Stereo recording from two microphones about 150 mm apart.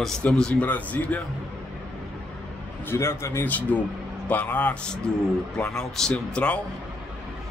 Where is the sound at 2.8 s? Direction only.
15° left (ahead or behind).